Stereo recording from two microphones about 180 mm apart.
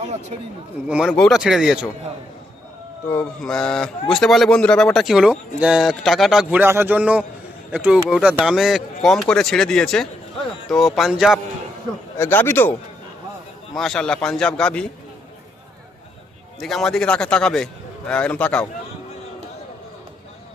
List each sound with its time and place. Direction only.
0.9 s speech: 5° right (ahead or behind)
3.1 s speech: 5° left (ahead or behind)
12.1 s speech: 10° left (ahead or behind)
13.7 s speech: 5° left (ahead or behind)
16.6 s speech: centre (ahead or behind)